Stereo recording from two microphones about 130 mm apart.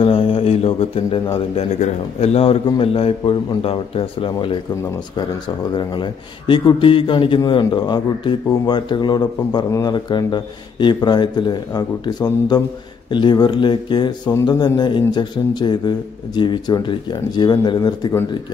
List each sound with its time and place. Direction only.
0.0 s a sound: 45° left (ahead or behind)
1.6 s a man's voice: 55° left (ahead or behind)
5.8 s a man's voice: 40° left (ahead or behind)